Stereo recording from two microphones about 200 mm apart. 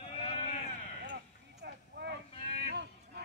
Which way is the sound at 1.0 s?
60° right (ahead or behind).